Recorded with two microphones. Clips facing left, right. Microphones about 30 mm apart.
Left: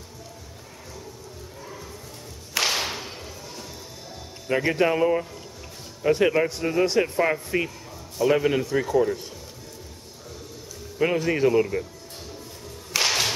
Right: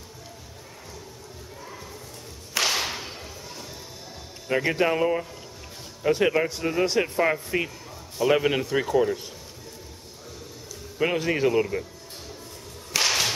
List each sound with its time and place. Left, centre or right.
2.5 s whip: centre
4.5 s speech: centre
8.2 s speech: centre
11.0 s speech: centre
12.9 s whip: centre